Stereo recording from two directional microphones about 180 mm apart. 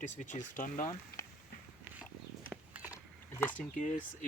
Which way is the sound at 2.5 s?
10° right (ahead or behind).